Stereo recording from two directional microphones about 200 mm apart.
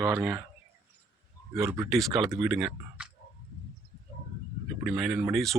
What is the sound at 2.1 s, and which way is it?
Speech, 15° right (ahead or behind).